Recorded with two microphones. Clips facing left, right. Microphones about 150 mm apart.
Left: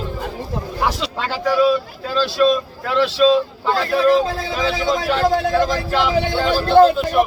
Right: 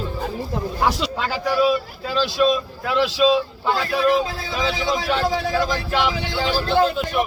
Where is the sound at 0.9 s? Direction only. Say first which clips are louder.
Even; centre (ahead or behind).